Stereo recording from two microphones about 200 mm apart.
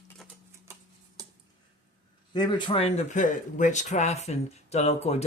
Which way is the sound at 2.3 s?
20° left (ahead or behind).